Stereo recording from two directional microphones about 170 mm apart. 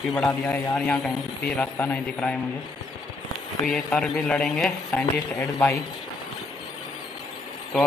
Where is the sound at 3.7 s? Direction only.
5° left (ahead or behind).